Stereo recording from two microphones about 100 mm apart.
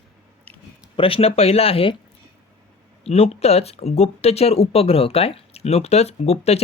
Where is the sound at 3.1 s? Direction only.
90° left.